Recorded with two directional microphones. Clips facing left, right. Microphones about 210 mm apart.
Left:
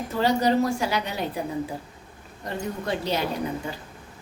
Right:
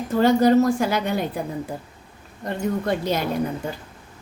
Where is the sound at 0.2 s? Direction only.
50° right (ahead or behind).